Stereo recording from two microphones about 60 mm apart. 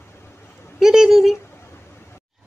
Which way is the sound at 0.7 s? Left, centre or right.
Centre.